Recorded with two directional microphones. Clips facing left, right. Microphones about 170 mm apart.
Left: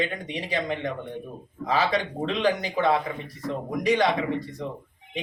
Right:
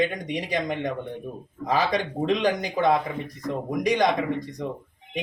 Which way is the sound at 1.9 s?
15° right (ahead or behind).